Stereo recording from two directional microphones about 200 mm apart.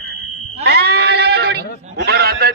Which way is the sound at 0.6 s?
55° right (ahead or behind).